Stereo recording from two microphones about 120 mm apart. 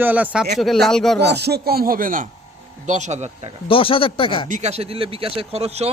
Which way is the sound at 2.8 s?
80° right.